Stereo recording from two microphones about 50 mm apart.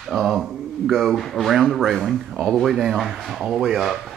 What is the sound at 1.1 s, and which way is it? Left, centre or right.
Speech, centre.